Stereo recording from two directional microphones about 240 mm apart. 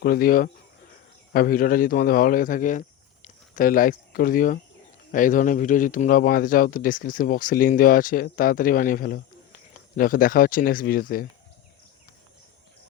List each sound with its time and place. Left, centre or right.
0.0 s speech: left